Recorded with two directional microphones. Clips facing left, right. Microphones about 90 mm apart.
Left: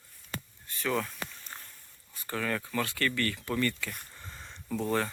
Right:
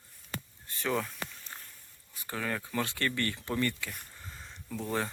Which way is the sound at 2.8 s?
25° right (ahead or behind).